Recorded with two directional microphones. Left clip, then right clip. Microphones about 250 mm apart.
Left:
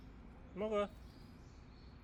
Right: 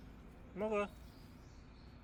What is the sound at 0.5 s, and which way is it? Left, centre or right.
Speech, centre.